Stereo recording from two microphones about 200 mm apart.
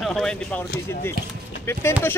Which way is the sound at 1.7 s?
15° left (ahead or behind).